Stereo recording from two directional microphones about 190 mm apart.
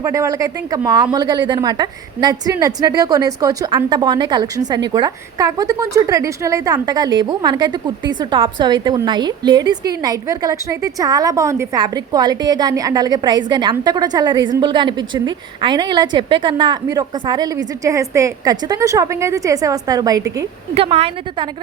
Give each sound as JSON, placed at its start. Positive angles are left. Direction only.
{"t": 0.0, "sound": "a woman's voice", "side_deg": -15}
{"t": 20.7, "sound": "a woman's voice", "side_deg": -30}